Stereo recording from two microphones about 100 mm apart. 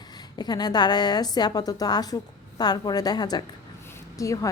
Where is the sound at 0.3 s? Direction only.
45° left (ahead or behind).